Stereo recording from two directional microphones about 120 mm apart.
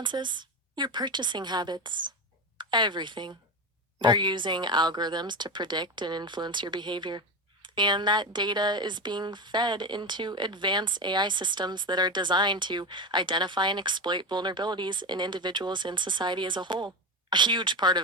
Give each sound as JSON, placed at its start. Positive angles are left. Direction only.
{"t": 0.0, "sound": "a woman's voice", "side_deg": -40}